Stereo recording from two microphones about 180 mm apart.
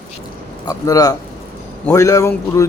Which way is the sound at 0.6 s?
20° left (ahead or behind).